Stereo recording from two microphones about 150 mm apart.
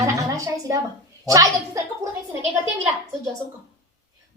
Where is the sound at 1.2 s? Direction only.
20° right (ahead or behind).